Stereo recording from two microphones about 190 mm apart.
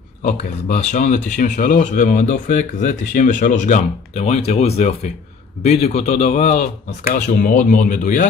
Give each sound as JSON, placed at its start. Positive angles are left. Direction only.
{"t": 0.2, "sound": "speech", "side_deg": 40}